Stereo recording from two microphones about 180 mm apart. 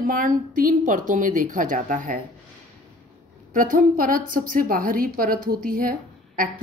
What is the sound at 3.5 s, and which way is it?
A woman's voice, 50° right (ahead or behind).